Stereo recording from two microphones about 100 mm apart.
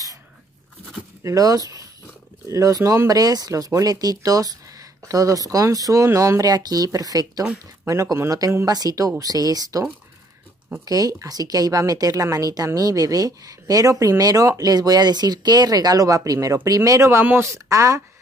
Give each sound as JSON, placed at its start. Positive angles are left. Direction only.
{"t": 1.2, "sound": "speech", "side_deg": -35}
{"t": 10.9, "sound": "speech", "side_deg": -40}